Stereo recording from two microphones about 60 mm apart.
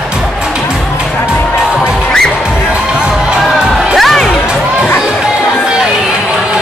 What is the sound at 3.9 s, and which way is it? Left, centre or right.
Music, centre.